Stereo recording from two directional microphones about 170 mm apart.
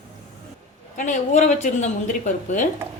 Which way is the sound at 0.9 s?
45° left (ahead or behind).